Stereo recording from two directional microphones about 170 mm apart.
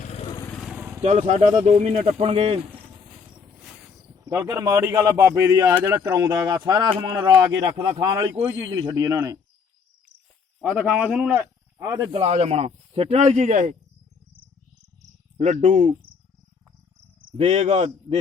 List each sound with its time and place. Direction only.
0.0 s vehicle: 40° left (ahead or behind)
0.3 s vehicle: 20° left (ahead or behind)
0.5 s vehicle: centre (ahead or behind)
1.0 s a man's voice: 45° right (ahead or behind)
4.3 s a man's voice: 20° right (ahead or behind)
10.6 s speech: 10° right (ahead or behind)
12.1 s a man's voice: 40° right (ahead or behind)
15.4 s speech: 45° right (ahead or behind)
17.3 s a man's voice: 40° right (ahead or behind)